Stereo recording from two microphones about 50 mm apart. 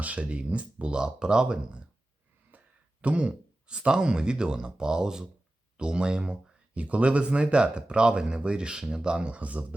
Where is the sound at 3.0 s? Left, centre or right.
Right.